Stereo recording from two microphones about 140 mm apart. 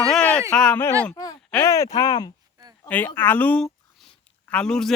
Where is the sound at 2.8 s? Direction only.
15° left (ahead or behind).